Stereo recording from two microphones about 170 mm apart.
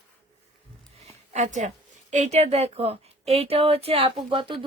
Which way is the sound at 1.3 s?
45° right (ahead or behind).